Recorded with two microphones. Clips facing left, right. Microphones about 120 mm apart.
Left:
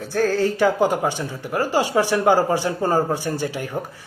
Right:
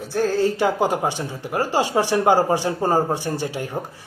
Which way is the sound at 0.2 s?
25° right (ahead or behind).